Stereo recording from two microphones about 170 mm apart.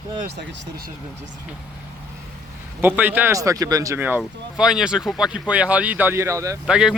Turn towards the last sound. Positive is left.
turn(degrees=-5)  # may be behind; listen again after turning